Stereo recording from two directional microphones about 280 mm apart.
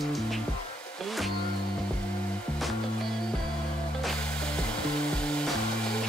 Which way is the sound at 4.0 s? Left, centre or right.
Centre.